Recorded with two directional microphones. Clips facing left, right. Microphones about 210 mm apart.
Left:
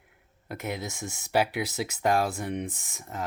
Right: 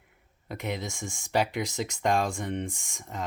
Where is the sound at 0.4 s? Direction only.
5° left (ahead or behind).